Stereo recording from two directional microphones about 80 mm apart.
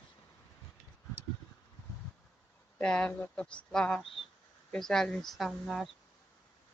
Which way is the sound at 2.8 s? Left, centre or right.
Centre.